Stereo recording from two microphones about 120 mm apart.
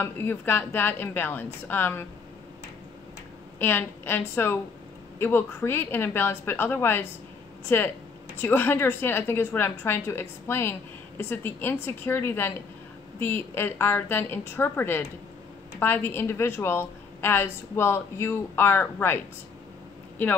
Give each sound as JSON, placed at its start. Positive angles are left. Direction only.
{"t": 0.0, "sound": "a woman's voice", "side_deg": 20}
{"t": 3.5, "sound": "a woman's voice", "side_deg": 20}